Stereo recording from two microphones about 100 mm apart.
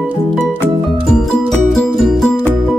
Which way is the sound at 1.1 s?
5° left (ahead or behind).